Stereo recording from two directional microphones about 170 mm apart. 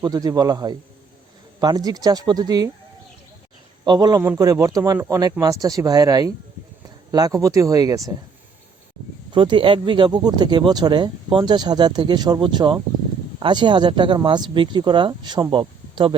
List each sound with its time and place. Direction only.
0.0 s speech: 20° right (ahead or behind)
3.8 s speech: 25° right (ahead or behind)
9.3 s speech: 30° right (ahead or behind)